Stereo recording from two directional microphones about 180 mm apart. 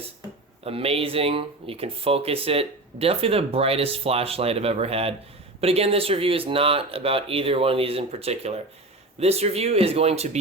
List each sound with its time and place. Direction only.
0.6 s speech: 35° right (ahead or behind)